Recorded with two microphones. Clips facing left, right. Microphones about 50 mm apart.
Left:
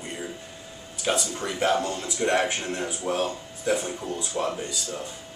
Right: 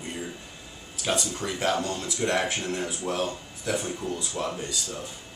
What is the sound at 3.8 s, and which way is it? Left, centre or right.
Speech, left.